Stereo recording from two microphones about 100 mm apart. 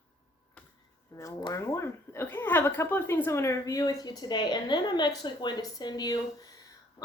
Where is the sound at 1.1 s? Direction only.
35° left (ahead or behind).